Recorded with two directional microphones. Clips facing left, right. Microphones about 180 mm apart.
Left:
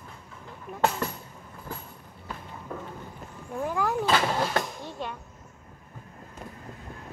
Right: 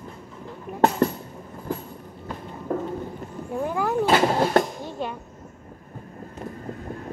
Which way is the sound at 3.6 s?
Centre (ahead or behind).